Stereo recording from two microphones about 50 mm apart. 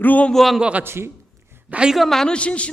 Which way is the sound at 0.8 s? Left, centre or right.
Right.